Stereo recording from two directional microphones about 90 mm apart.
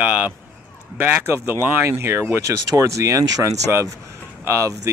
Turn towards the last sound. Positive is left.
turn(degrees=-35)  # may be behind; listen again after turning